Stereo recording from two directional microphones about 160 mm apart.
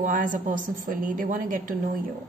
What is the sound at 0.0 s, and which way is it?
A woman's voice, 55° right (ahead or behind).